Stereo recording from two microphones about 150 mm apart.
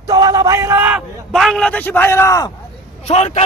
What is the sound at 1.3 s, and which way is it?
A man's voice, centre (ahead or behind).